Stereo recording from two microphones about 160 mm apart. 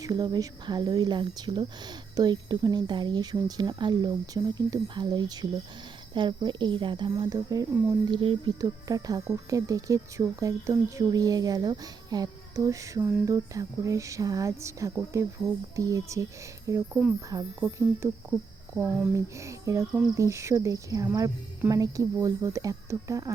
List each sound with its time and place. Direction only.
0.0 s speech: 25° right (ahead or behind)
13.2 s speech: 20° right (ahead or behind)
18.8 s speech: 5° right (ahead or behind)
19.1 s speech: 20° right (ahead or behind)